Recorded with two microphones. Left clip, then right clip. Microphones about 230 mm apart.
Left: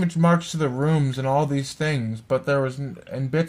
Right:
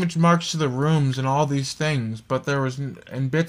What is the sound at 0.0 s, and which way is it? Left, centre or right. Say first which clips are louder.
Speech: right 1 dB; right.